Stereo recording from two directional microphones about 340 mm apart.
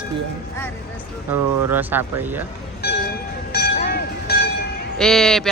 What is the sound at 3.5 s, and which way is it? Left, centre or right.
Train, left.